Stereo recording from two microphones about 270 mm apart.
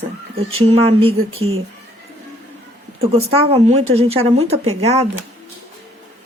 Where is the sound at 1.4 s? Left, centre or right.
Right.